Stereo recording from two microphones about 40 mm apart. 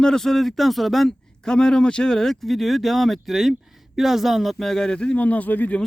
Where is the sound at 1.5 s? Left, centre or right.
Centre.